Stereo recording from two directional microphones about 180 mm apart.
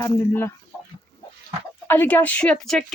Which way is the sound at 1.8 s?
10° left (ahead or behind).